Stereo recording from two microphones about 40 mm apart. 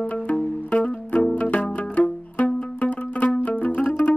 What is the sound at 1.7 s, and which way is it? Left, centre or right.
Music, left.